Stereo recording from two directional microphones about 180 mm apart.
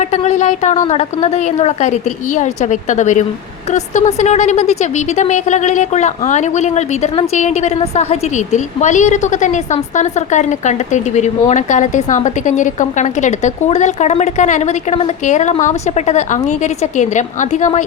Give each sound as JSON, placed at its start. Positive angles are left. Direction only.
{"t": 0.0, "sound": "a woman's voice", "side_deg": 40}